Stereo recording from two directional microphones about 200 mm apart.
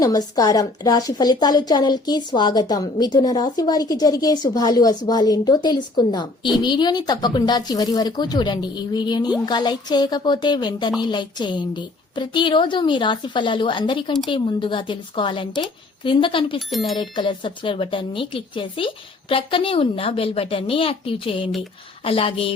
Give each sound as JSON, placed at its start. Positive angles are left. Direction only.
{"t": 0.0, "sound": "a woman's voice", "side_deg": 20}
{"t": 16.6, "sound": "speech", "side_deg": 0}
{"t": 17.0, "sound": "a woman's voice", "side_deg": 25}